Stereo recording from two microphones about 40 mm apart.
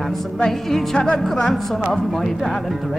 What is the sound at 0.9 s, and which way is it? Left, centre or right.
Speech, centre.